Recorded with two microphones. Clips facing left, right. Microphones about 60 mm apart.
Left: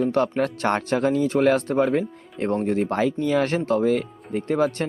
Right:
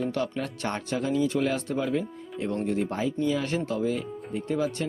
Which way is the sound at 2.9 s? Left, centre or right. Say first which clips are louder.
Left 5 dB; left.